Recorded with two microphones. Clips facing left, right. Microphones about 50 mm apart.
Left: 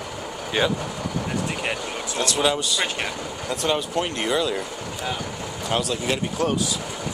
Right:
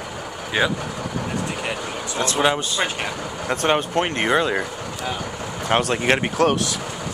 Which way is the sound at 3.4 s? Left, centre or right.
Right.